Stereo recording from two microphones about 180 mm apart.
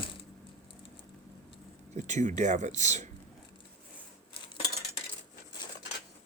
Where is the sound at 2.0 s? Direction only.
40° right (ahead or behind).